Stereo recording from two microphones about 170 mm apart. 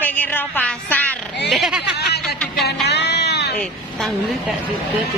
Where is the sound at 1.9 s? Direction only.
70° left (ahead or behind).